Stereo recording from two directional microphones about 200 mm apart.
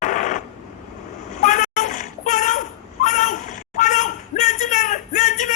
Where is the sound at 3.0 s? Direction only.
40° left (ahead or behind).